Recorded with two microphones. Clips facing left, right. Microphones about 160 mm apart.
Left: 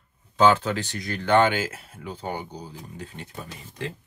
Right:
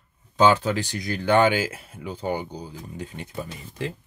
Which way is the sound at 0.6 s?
15° right (ahead or behind).